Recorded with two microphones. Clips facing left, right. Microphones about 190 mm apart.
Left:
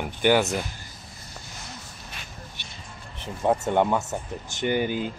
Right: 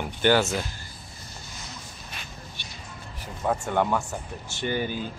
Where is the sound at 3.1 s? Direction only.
25° left (ahead or behind).